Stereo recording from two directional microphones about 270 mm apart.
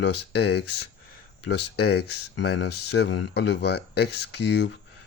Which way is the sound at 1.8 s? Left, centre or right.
Left.